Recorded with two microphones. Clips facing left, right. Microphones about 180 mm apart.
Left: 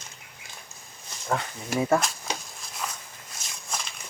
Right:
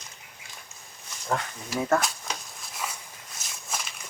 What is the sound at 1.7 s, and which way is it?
Speech, 55° left (ahead or behind).